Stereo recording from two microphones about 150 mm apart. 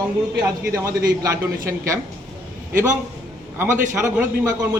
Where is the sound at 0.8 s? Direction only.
25° right (ahead or behind).